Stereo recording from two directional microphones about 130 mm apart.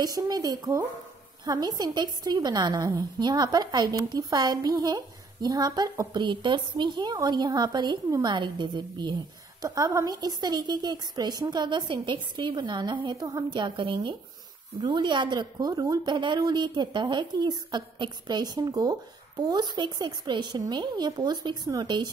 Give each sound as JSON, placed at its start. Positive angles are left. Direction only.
{"t": 0.0, "sound": "a woman's voice", "side_deg": -30}